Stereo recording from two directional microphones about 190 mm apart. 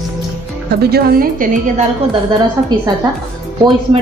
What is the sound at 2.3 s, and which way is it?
Speech, 20° right (ahead or behind).